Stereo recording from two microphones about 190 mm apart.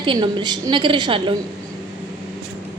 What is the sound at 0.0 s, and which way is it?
A woman's voice, 25° right (ahead or behind).